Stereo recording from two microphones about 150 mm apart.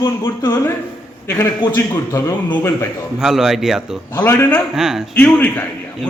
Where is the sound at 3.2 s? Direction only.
5° right (ahead or behind).